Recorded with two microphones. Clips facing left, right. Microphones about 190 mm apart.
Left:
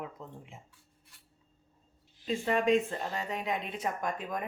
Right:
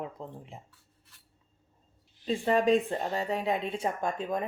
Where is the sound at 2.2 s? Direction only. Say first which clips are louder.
Right 3 dB; 35° right (ahead or behind).